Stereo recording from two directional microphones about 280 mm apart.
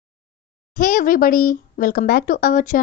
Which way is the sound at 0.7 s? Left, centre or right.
Left.